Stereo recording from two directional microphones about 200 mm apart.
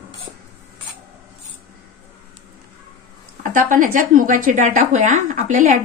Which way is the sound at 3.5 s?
40° right (ahead or behind).